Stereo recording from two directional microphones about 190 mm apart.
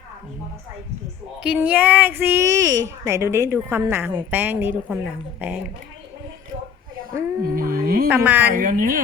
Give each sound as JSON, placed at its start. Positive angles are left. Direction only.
{"t": 1.4, "sound": "a woman's voice", "side_deg": -5}
{"t": 7.5, "sound": "speech", "side_deg": -50}
{"t": 8.1, "sound": "a woman's voice", "side_deg": -10}
{"t": 8.5, "sound": "speech", "side_deg": -45}